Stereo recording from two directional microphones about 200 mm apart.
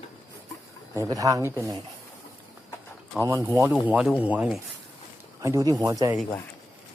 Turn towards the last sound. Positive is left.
turn(degrees=-15)  # may be behind; listen again after turning